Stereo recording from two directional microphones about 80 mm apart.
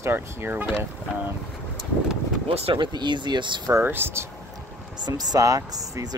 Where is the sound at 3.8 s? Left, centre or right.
Right.